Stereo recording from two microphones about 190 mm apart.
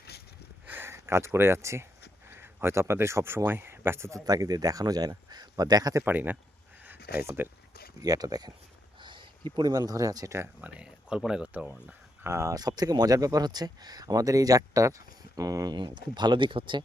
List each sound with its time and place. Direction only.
0.7 s speech: 10° right (ahead or behind)